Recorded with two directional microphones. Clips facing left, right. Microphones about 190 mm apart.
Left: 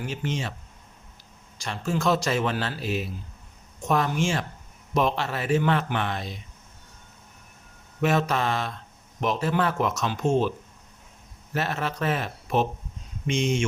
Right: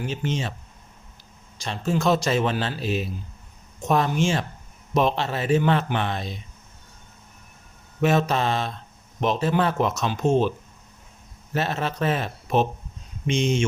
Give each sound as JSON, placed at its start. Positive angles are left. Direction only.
{"t": 0.1, "sound": "a man's voice", "side_deg": -25}
{"t": 1.6, "sound": "a man's voice", "side_deg": -20}
{"t": 8.0, "sound": "a man's voice", "side_deg": -25}
{"t": 11.5, "sound": "a man's voice", "side_deg": -25}